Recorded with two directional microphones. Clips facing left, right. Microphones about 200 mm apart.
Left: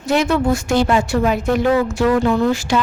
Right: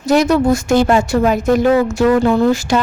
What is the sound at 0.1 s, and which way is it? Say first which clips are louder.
A woman's voice: right 4 dB; 40° right (ahead or behind).